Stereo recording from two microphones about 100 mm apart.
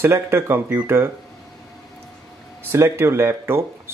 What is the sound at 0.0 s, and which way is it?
Speech, 25° right (ahead or behind).